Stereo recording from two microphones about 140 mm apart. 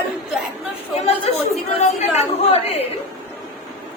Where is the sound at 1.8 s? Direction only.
55° left (ahead or behind).